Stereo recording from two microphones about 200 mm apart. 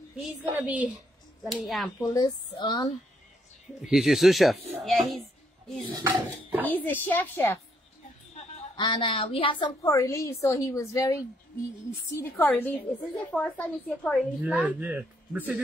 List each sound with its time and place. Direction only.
0.2 s a man's voice: 5° right (ahead or behind)
2.0 s speech: 20° left (ahead or behind)
3.8 s a man's voice: centre (ahead or behind)
6.6 s a woman's voice: 10° left (ahead or behind)
8.7 s a woman's voice: 25° left (ahead or behind); by 14.2 s 5° left (ahead or behind)
14.4 s a man's voice: 5° right (ahead or behind)